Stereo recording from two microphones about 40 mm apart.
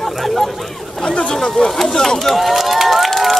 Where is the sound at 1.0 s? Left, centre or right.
Left.